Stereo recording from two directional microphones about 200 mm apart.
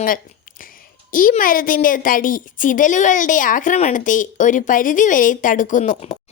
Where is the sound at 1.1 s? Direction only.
45° left (ahead or behind).